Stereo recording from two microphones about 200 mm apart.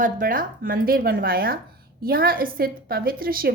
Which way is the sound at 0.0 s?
45° right (ahead or behind).